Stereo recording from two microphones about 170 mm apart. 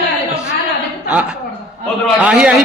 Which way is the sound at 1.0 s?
10° right (ahead or behind).